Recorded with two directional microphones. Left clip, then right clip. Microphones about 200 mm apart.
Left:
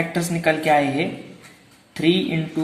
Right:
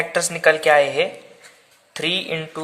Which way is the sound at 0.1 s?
50° right (ahead or behind).